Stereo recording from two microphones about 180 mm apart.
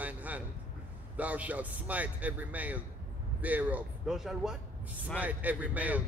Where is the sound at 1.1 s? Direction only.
10° right (ahead or behind).